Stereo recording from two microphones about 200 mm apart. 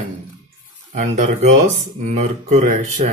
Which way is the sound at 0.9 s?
35° right (ahead or behind).